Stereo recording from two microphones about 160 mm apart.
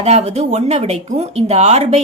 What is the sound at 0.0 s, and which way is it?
Speech, 45° right (ahead or behind).